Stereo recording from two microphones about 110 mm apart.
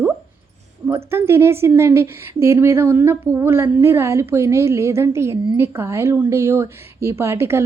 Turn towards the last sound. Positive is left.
turn(degrees=-25)  # may be behind; listen again after turning